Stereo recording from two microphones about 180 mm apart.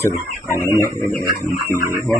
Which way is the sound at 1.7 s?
15° right (ahead or behind).